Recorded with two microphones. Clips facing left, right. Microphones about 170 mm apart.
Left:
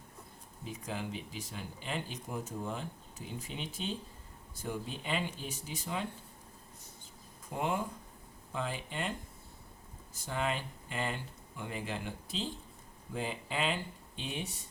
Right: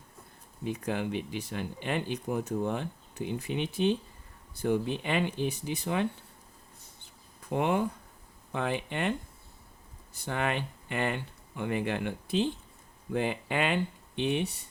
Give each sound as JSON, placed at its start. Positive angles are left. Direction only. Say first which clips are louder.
{"t": 0.6, "sound": "speech", "louder": "right 8 dB", "side_deg": -65}
{"t": 7.5, "sound": "speech", "louder": "right 7 dB", "side_deg": -65}
{"t": 10.2, "sound": "speech", "louder": "right 4 dB", "side_deg": -65}